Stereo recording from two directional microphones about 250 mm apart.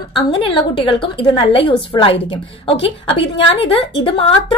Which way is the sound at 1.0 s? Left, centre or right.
Left.